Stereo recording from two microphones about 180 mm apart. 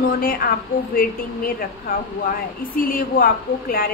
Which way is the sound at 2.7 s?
50° left (ahead or behind).